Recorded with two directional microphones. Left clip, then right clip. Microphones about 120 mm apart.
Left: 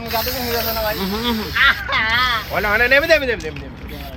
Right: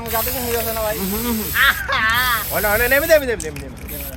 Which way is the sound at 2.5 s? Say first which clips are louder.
Left 3 dB; centre (ahead or behind).